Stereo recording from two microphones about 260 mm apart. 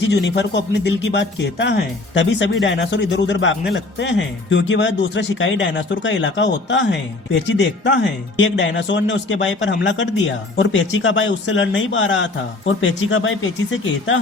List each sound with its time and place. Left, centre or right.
0.1 s speech: left